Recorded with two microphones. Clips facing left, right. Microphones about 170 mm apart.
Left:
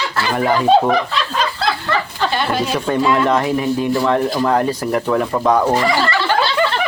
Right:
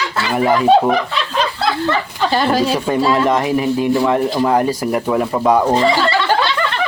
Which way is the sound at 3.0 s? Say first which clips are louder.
Even; 30° right (ahead or behind).